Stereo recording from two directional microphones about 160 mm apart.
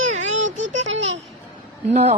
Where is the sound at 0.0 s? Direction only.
50° right (ahead or behind).